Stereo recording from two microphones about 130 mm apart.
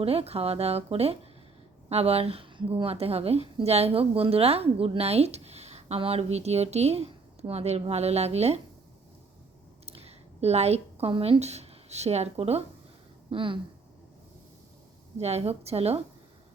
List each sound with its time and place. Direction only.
0.0 s a woman's voice: 50° right (ahead or behind)
9.8 s a woman's voice: 50° right (ahead or behind)
13.3 s speech: 40° right (ahead or behind)
15.2 s a woman's voice: 55° right (ahead or behind)